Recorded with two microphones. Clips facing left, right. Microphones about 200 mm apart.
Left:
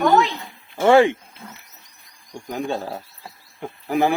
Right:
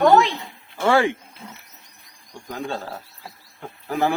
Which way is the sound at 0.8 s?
20° left (ahead or behind).